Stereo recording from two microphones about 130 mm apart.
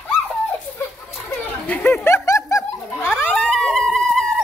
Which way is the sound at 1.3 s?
10° left (ahead or behind).